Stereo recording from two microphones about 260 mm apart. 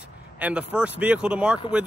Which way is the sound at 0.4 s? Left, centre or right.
Centre.